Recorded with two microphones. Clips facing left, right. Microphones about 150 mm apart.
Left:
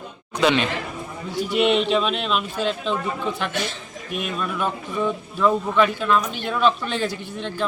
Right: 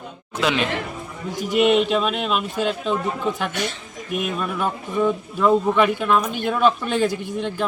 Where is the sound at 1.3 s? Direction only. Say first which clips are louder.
Left 1 dB; 45° right (ahead or behind).